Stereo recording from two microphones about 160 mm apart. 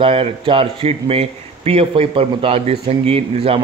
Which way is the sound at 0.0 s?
35° right (ahead or behind).